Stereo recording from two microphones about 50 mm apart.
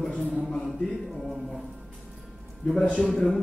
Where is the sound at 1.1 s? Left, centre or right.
Centre.